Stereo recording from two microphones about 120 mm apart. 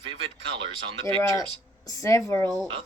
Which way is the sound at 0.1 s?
50° right (ahead or behind).